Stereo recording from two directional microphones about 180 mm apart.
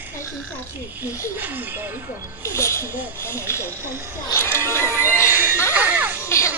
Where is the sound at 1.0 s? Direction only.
15° left (ahead or behind).